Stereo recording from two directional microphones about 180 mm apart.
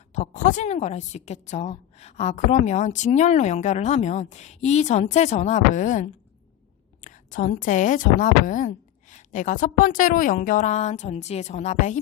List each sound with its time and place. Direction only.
0.1 s a woman's voice: 45° left (ahead or behind)